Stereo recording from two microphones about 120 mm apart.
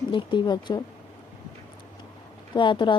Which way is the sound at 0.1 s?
40° left (ahead or behind).